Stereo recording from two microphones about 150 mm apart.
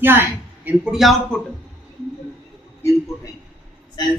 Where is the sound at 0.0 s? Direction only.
15° right (ahead or behind).